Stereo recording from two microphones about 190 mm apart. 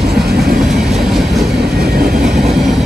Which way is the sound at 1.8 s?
50° right (ahead or behind).